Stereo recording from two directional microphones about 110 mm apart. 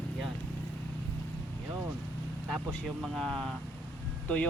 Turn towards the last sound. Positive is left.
turn(degrees=15)  # may be behind; listen again after turning